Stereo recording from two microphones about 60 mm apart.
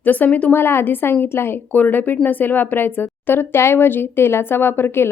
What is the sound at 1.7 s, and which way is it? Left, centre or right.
A woman's voice, left.